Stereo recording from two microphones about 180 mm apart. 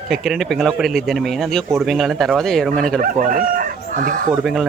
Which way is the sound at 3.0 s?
50° right (ahead or behind).